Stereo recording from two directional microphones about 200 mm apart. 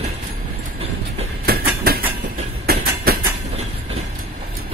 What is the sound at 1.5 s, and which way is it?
Train, 50° right (ahead or behind).